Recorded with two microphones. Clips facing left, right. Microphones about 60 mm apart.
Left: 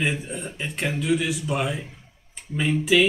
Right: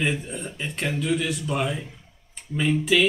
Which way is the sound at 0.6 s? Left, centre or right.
Centre.